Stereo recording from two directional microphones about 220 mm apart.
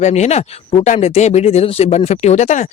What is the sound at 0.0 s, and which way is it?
Speech, 30° left (ahead or behind).